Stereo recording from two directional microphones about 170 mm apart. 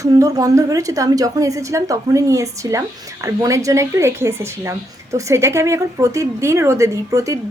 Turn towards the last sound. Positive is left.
turn(degrees=-20)  # may be behind; listen again after turning